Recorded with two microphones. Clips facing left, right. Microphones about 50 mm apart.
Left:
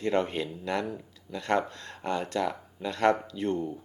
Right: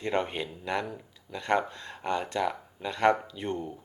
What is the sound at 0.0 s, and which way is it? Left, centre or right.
Speech, centre.